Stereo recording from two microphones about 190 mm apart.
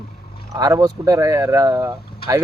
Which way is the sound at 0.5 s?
20° right (ahead or behind).